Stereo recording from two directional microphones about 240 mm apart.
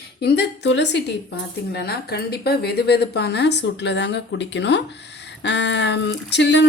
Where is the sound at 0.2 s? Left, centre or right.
Left.